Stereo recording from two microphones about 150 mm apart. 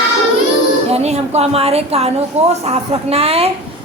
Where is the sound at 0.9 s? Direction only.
45° right (ahead or behind).